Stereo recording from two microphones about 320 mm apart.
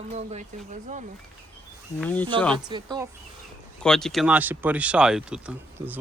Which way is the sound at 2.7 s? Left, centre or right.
Centre.